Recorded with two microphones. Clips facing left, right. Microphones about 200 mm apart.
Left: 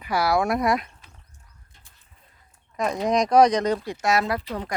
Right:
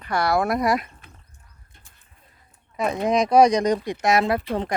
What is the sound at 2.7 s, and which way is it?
Speech, 5° right (ahead or behind).